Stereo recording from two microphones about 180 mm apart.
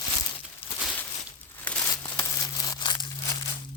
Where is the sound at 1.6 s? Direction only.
5° left (ahead or behind).